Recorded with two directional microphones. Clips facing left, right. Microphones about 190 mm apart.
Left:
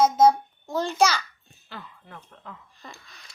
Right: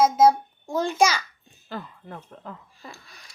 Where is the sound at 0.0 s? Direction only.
5° right (ahead or behind).